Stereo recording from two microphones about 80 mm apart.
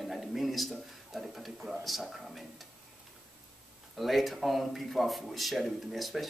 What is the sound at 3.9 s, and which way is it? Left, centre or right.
Speech, centre.